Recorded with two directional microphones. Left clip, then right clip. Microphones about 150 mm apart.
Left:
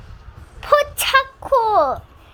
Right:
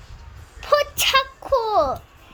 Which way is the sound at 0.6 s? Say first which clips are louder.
Left 2 dB; 5° left (ahead or behind).